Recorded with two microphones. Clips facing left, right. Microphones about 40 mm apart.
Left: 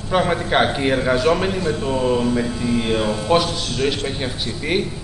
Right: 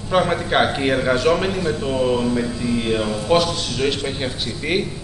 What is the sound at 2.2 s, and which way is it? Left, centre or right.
Mantra, centre.